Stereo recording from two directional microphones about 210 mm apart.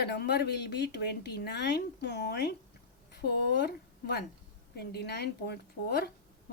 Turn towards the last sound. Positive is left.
turn(degrees=50)  # may be behind; listen again after turning